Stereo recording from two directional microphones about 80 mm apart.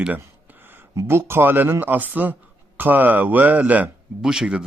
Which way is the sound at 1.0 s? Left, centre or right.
Right.